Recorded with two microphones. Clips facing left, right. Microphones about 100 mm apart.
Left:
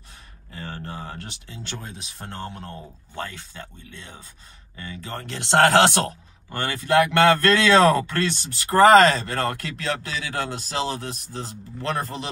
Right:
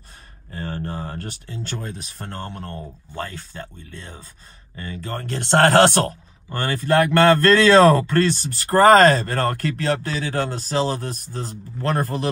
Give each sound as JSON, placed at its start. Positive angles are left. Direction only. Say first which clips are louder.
{"t": 0.5, "sound": "speech", "louder": "right 5 dB", "side_deg": -40}